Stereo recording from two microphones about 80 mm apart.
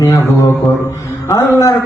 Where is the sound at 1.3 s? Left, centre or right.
Left.